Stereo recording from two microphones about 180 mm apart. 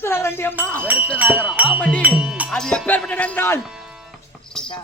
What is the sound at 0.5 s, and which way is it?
Speech, 10° right (ahead or behind).